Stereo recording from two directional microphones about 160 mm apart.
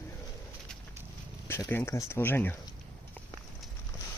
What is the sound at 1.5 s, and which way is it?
Speech, 15° left (ahead or behind).